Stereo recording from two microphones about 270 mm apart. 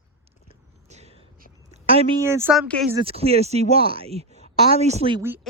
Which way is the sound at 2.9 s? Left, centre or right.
Right.